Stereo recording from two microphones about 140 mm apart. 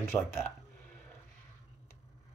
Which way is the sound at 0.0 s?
15° left (ahead or behind).